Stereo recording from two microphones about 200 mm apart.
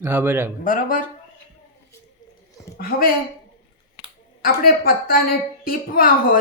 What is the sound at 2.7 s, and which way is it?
Speech, 45° left (ahead or behind).